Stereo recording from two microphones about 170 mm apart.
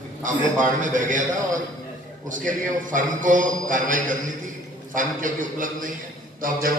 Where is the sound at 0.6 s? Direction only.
50° right (ahead or behind).